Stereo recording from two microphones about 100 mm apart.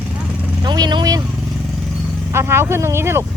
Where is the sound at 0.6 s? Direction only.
45° right (ahead or behind).